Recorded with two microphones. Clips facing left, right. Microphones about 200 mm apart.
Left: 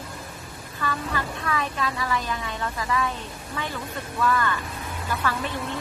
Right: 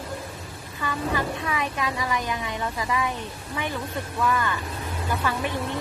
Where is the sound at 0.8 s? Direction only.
15° right (ahead or behind).